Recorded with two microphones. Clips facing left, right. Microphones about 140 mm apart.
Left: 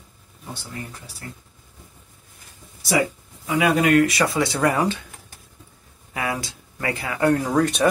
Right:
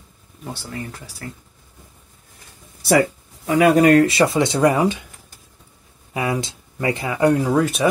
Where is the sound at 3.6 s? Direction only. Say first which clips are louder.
Right 5 dB; 40° right (ahead or behind); by 5.0 s 15° right (ahead or behind).